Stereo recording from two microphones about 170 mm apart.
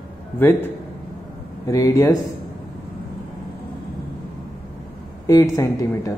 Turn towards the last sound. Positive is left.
turn(degrees=20)  # may be behind; listen again after turning